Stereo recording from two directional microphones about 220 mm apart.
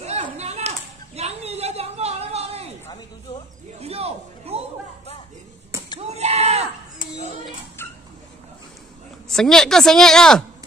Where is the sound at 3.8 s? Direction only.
30° right (ahead or behind).